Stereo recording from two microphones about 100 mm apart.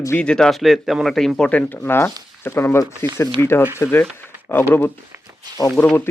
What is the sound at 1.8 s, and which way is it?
Speech, 25° left (ahead or behind).